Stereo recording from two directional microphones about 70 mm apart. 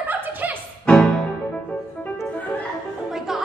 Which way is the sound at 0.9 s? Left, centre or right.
Centre.